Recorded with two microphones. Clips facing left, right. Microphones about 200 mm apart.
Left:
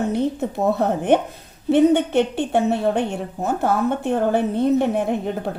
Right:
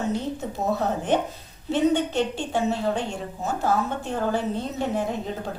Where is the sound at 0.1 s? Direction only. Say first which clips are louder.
Left 6 dB; 60° left (ahead or behind).